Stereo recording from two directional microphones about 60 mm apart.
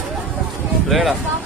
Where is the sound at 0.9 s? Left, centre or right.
Centre.